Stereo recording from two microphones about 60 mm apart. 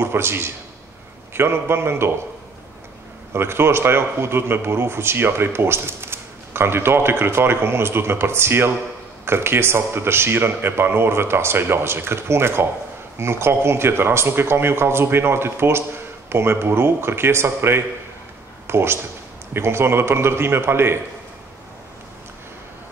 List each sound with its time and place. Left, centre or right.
0.0 s a man's voice: right
3.3 s a man's voice: right